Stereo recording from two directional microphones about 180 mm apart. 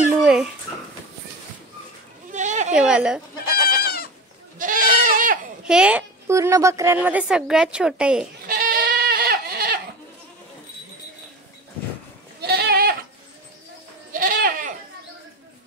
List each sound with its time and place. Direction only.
0.2 s a sound: 5° right (ahead or behind)
2.3 s a sound: 40° right (ahead or behind)
2.7 s a sound: 5° right (ahead or behind)
3.6 s goat: 55° left (ahead or behind)
4.6 s goat: 50° right (ahead or behind)
5.7 s a woman's voice: 5° right (ahead or behind)
8.5 s goat: 55° right (ahead or behind)
12.4 s goat: 65° right (ahead or behind)
14.1 s goat: 50° right (ahead or behind)